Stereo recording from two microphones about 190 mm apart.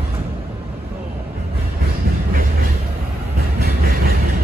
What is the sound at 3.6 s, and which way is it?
Vehicle, 55° right (ahead or behind).